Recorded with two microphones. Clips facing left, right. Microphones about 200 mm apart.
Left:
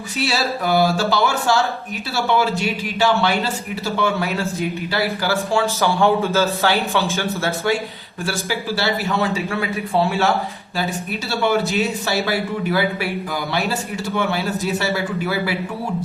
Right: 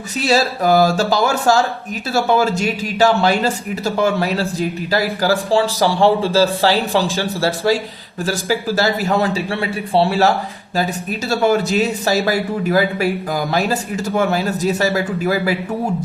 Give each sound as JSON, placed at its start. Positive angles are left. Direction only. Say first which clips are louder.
{"t": 0.3, "sound": "a man's voice", "louder": "right 7 dB", "side_deg": -40}